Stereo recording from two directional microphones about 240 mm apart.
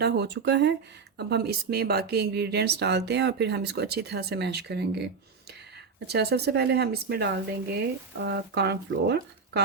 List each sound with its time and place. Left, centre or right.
0.0 s speech: right
6.1 s speech: right